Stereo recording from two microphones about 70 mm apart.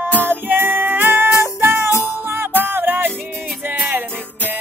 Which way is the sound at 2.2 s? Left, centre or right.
Right.